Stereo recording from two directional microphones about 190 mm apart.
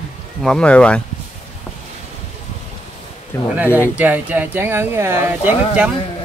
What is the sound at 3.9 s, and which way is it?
Speech, 10° right (ahead or behind).